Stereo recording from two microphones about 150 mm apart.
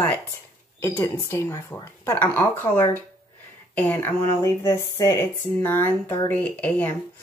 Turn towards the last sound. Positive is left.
turn(degrees=10)  # may be behind; listen again after turning